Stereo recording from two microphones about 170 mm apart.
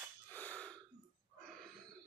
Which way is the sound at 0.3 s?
10° left (ahead or behind).